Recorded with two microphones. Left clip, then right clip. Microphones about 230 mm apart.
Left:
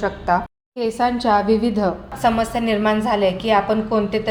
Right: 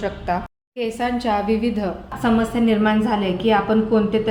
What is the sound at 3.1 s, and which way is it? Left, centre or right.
Speech, left.